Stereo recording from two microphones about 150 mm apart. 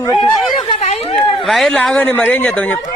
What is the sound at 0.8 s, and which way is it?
Chatter, 45° left (ahead or behind).